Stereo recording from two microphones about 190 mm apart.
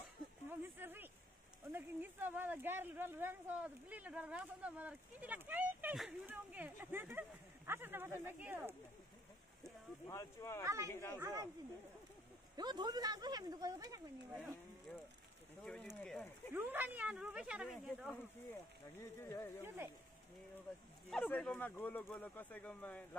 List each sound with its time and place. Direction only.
0.5 s a sound: 10° right (ahead or behind)
1.7 s speech: 10° right (ahead or behind)
10.0 s speech: 15° left (ahead or behind)
10.6 s speech: 15° right (ahead or behind)
10.9 s speech: 15° left (ahead or behind)
11.1 s speech: 15° right (ahead or behind)
12.5 s speech: 20° right (ahead or behind)
15.6 s speech: 5° left (ahead or behind)
16.5 s speech: 10° right (ahead or behind)
18.1 s speech: 10° left (ahead or behind)
21.1 s speech: 10° left (ahead or behind)